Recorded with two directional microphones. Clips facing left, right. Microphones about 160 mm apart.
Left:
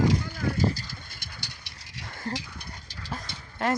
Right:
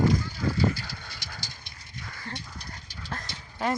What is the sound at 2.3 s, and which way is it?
Clip-clop, 40° left (ahead or behind).